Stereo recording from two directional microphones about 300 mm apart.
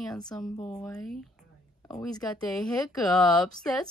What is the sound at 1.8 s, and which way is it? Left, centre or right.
Speech, centre.